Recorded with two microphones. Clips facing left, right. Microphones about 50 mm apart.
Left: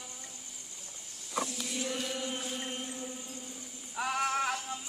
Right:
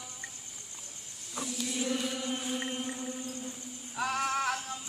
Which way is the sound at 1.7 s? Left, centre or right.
Centre.